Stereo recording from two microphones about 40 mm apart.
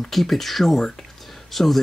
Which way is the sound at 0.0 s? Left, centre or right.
Centre.